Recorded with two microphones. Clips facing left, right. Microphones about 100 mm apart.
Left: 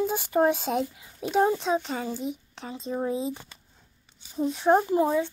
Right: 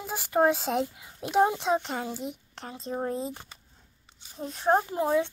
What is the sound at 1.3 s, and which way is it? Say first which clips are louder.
Speech: even; 15° right (ahead or behind).